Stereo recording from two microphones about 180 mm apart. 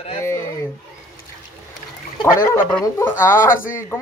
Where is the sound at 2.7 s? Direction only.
15° left (ahead or behind).